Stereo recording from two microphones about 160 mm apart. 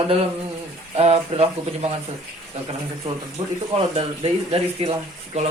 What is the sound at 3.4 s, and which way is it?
Speech, 35° right (ahead or behind).